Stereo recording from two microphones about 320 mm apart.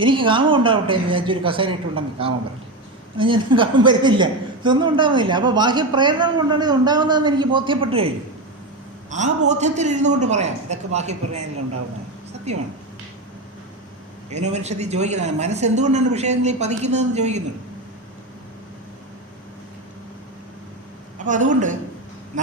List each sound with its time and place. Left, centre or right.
0.0 s a woman's voice: centre
12.5 s speech: right
14.3 s speech: right
21.2 s speech: right